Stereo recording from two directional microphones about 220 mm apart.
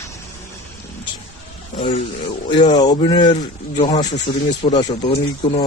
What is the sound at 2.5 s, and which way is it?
Speech, 20° left (ahead or behind).